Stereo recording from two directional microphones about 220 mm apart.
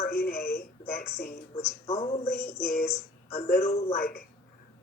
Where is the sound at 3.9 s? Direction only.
45° left (ahead or behind).